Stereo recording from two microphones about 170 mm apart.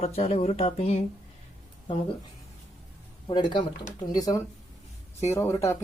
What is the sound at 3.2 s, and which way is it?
Speech, 25° left (ahead or behind).